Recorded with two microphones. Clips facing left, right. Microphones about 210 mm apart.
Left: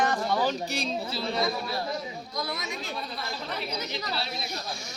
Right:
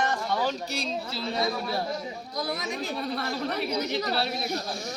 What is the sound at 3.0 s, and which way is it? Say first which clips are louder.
Speech: right 6 dB; 65° right (ahead or behind).